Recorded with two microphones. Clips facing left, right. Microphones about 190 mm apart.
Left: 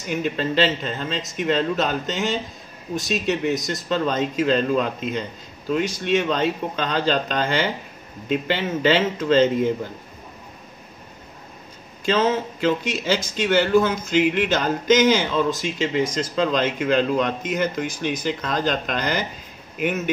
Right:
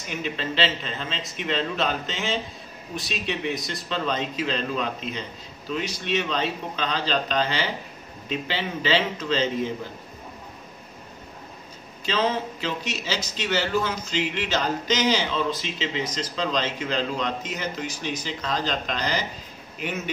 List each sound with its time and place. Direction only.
0.1 s a man's voice: 45° left (ahead or behind)
12.1 s a man's voice: 50° left (ahead or behind)